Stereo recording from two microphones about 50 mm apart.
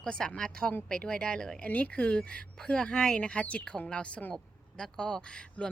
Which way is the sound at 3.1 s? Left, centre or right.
Left.